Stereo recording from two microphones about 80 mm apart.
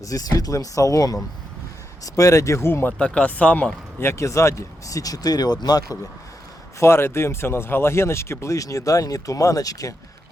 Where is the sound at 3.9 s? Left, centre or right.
Left.